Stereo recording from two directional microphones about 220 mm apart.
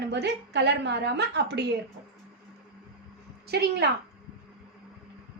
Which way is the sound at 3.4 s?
45° right (ahead or behind).